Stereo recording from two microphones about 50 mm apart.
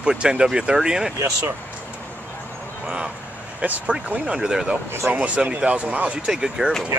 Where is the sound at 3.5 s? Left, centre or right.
Right; by 4.7 s centre.